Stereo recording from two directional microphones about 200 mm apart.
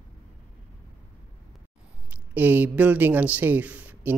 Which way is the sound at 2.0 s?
10° right (ahead or behind).